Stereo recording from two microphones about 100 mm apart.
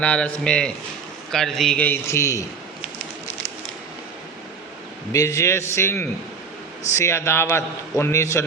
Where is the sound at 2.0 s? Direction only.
30° left (ahead or behind).